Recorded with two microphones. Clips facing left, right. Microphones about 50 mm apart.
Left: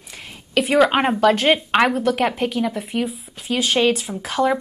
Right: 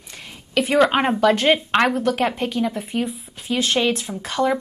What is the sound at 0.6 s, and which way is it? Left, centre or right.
Speech, centre.